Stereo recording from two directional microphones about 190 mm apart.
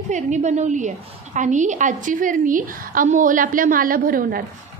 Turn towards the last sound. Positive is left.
turn(degrees=-50)  # may be behind; listen again after turning